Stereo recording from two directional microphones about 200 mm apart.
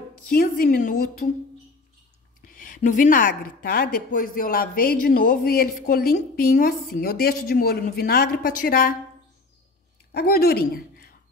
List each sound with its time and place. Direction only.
0.3 s a woman's voice: 45° left (ahead or behind)
2.4 s a woman's voice: 45° left (ahead or behind)
10.1 s speech: 50° left (ahead or behind)